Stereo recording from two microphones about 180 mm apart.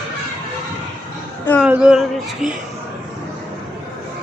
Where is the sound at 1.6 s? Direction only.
5° right (ahead or behind).